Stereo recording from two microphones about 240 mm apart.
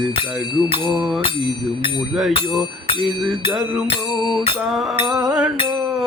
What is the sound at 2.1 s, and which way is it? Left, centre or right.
Mantra, centre.